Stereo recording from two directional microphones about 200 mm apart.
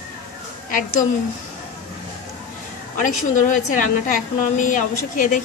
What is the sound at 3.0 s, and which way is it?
A woman's voice, 40° left (ahead or behind).